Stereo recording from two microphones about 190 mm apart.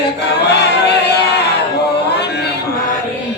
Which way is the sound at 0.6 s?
60° left (ahead or behind).